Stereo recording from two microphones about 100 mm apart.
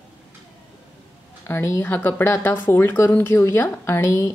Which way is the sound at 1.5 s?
25° left (ahead or behind).